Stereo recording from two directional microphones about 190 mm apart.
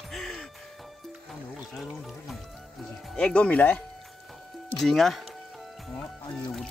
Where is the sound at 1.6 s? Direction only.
Centre (ahead or behind).